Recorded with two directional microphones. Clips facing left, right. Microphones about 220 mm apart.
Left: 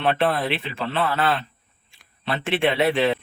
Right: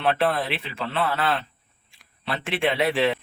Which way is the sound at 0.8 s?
30° left (ahead or behind).